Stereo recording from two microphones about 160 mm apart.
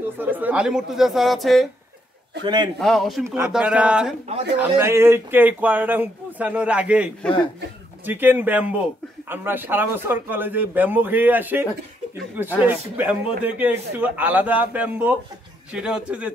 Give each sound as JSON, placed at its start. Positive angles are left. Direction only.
{"t": 0.2, "sound": "speech", "side_deg": -10}
{"t": 2.4, "sound": "a man's voice", "side_deg": -25}
{"t": 2.8, "sound": "speech", "side_deg": 0}